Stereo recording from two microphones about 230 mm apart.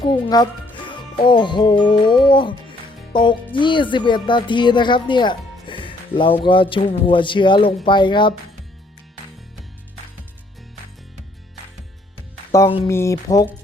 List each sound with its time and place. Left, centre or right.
0.0 s speech: centre
12.5 s speech: centre